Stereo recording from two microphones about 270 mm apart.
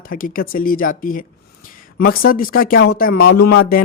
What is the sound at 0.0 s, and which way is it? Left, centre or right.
Speech, left.